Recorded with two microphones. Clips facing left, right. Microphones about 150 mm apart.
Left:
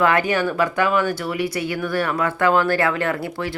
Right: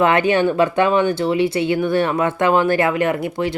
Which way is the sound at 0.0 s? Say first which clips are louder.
Right 4 dB; 20° right (ahead or behind).